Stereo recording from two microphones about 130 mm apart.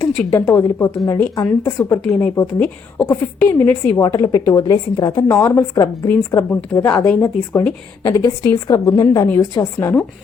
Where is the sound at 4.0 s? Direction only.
25° left (ahead or behind).